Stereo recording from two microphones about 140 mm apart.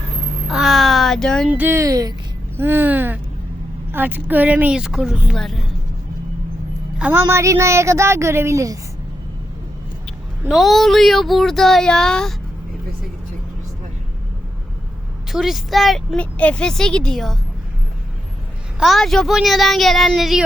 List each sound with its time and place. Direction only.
0.5 s a child's voice: centre (ahead or behind)
1.5 s a woman's voice: 15° right (ahead or behind)
7.0 s a woman's voice: 15° right (ahead or behind)
10.5 s a woman's voice: centre (ahead or behind)
15.3 s a woman's voice: centre (ahead or behind)
18.8 s a woman's voice: centre (ahead or behind)